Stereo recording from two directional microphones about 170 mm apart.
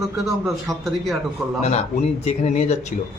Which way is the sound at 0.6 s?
Centre (ahead or behind).